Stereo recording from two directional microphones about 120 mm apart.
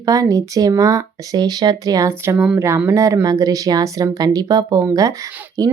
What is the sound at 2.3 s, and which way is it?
Speech, 5° right (ahead or behind).